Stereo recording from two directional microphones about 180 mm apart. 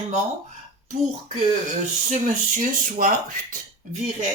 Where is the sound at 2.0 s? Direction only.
45° right (ahead or behind).